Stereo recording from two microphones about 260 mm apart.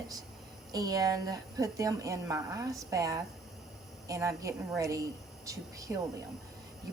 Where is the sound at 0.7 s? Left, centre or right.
Centre.